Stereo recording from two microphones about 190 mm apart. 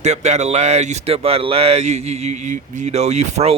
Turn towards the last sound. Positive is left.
turn(degrees=-35)  # may be behind; listen again after turning